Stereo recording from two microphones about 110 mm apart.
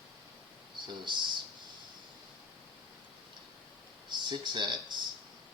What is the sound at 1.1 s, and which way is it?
Speech, 45° right (ahead or behind).